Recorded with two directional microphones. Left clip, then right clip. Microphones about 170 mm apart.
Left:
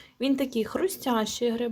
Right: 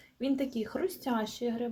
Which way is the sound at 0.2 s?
35° left (ahead or behind).